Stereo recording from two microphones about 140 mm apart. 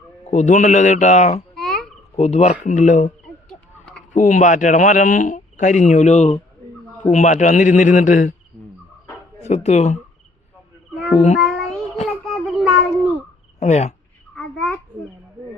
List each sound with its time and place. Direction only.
0.3 s speech: 60° left (ahead or behind)
1.5 s frog: centre (ahead or behind)
2.1 s speech: 50° left (ahead or behind)
4.1 s speech: 60° left (ahead or behind)
9.4 s speech: 50° left (ahead or behind)
11.3 s child singing: centre (ahead or behind)
13.6 s speech: 50° left (ahead or behind)
14.3 s a sound: 5° left (ahead or behind)